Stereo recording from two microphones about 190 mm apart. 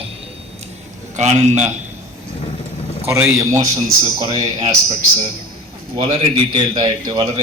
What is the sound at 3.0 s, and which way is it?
Speech, 15° right (ahead or behind).